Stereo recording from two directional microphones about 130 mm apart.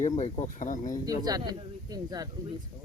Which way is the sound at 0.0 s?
70° left (ahead or behind).